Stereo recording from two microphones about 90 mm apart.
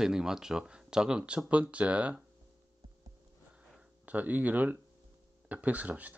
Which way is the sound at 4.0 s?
15° right (ahead or behind).